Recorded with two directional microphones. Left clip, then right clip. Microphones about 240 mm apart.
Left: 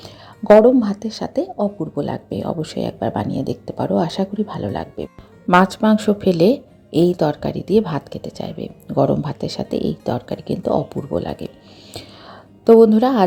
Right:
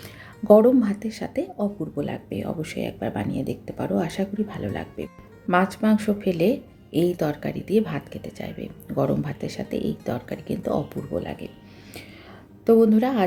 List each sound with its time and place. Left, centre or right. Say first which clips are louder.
0.0 s music: left 4 dB; centre
1.4 s speech: left 7 dB; centre
4.5 s speech: left 6 dB; centre
5.5 s speech: left 7 dB; left
10.9 s speech: left 6 dB; centre
11.2 s speech: left 6 dB; left
12.6 s speech: left 7 dB; left